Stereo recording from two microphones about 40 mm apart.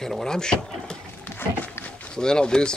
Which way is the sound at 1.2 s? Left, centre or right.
Left.